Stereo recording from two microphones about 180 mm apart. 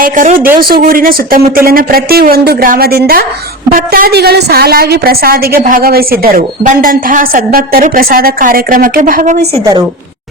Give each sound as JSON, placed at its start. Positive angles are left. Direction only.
{"t": 0.0, "sound": "a woman's voice", "side_deg": -50}